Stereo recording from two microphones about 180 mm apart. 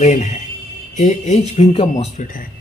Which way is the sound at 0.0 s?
40° left (ahead or behind).